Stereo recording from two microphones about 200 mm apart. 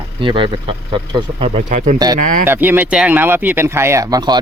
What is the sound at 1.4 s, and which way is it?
Speech, 35° right (ahead or behind).